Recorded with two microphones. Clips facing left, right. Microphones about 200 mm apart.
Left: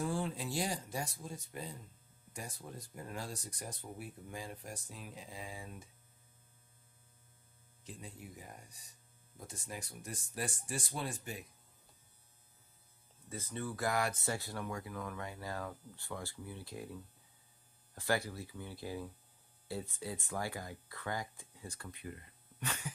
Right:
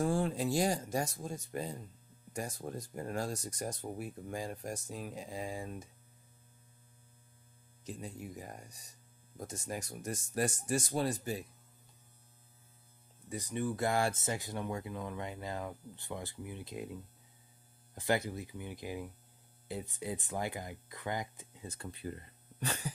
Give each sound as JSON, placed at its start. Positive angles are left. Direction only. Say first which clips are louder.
{"t": 0.0, "sound": "speech", "louder": "right 6 dB", "side_deg": -45}
{"t": 7.8, "sound": "speech", "louder": "right 6 dB", "side_deg": -45}
{"t": 13.3, "sound": "speech", "louder": "right 6 dB", "side_deg": -15}